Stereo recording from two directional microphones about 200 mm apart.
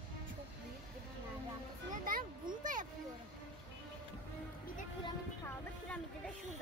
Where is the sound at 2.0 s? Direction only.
40° right (ahead or behind).